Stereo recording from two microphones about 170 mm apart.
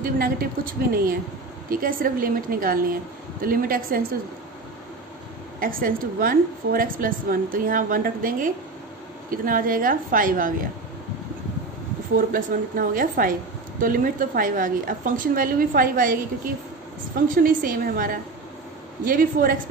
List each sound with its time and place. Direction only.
0.0 s a woman's voice: 60° right (ahead or behind)
5.6 s a woman's voice: 55° right (ahead or behind)
12.3 s a woman's voice: 55° right (ahead or behind)
17.3 s a woman's voice: 55° right (ahead or behind)